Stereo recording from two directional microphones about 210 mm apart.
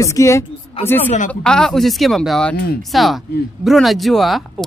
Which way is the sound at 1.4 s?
5° left (ahead or behind).